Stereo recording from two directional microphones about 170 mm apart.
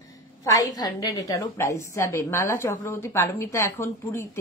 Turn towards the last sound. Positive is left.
turn(degrees=15)  # may be behind; listen again after turning